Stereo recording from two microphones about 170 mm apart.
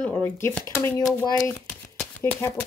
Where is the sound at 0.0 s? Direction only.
10° left (ahead or behind).